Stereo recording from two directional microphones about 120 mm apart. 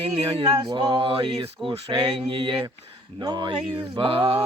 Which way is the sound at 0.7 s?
35° right (ahead or behind).